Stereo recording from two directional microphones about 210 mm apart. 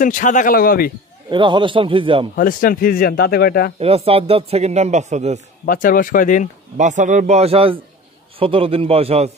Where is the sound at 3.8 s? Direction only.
30° right (ahead or behind).